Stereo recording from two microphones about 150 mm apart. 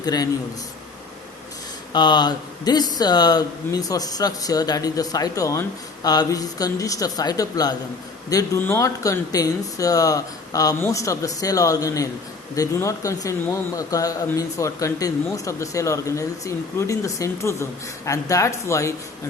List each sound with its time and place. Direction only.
0.0 s a man's voice: 25° left (ahead or behind)
1.9 s speech: 30° left (ahead or behind)